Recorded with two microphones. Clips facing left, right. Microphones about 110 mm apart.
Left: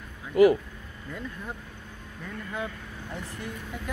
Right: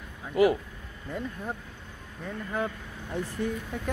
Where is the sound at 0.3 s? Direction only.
25° right (ahead or behind).